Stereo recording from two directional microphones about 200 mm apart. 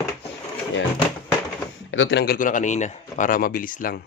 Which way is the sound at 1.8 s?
70° left (ahead or behind).